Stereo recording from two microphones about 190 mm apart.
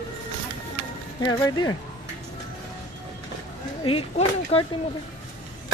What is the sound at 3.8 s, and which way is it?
Speech, 30° left (ahead or behind).